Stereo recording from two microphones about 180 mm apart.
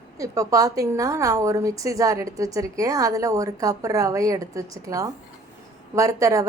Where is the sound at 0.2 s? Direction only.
20° right (ahead or behind).